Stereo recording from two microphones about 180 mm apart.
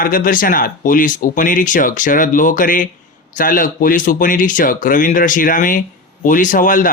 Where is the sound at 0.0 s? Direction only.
50° left (ahead or behind).